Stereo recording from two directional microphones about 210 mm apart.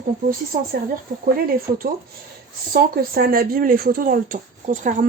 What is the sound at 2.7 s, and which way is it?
Speech, 50° right (ahead or behind).